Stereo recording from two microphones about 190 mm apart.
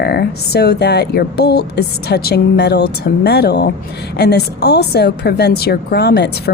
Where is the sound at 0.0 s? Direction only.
55° left (ahead or behind).